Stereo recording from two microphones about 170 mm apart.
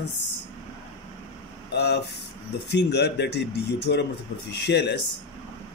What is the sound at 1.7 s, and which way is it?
Speech, 80° left.